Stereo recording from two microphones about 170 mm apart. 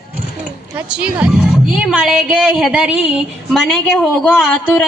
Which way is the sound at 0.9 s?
5° right (ahead or behind).